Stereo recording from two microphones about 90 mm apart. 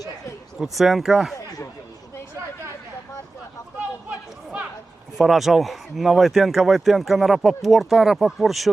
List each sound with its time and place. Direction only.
0.6 s speech: centre (ahead or behind)
5.1 s speech: centre (ahead or behind)